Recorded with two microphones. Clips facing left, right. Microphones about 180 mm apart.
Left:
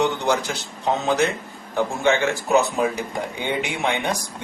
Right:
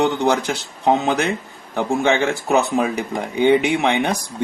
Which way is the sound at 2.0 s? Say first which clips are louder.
Even; 60° right (ahead or behind).